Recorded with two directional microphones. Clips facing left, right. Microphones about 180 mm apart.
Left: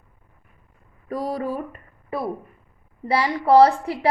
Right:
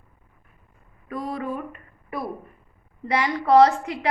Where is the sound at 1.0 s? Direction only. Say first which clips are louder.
Left 3 dB; 40° left (ahead or behind).